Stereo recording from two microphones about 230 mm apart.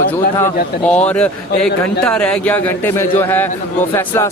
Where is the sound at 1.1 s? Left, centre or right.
Centre.